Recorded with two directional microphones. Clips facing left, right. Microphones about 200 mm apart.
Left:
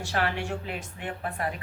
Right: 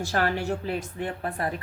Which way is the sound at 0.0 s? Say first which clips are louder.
Right 3 dB; 40° right (ahead or behind).